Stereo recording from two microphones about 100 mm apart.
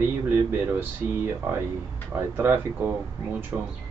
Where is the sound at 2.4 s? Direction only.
20° right (ahead or behind).